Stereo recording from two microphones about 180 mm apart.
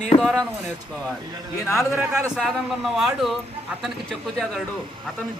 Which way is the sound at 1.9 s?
15° right (ahead or behind).